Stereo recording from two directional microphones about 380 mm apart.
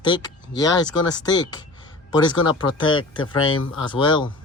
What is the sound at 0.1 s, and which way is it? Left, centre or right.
Speech, centre.